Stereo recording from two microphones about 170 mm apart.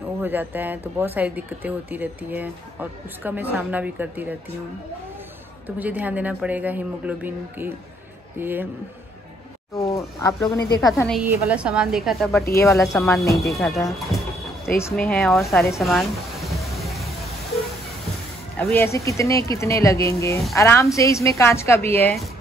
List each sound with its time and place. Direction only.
0.2 s speech: 10° right (ahead or behind)
5.8 s speech: 10° right (ahead or behind)
9.8 s speech: 20° left (ahead or behind)
11.2 s a woman's voice: 5° right (ahead or behind)
12.9 s speech: 15° left (ahead or behind)
13.5 s music: centre (ahead or behind)
15.0 s a woman's voice: centre (ahead or behind)
15.8 s music: centre (ahead or behind)
18.6 s speech: 10° left (ahead or behind)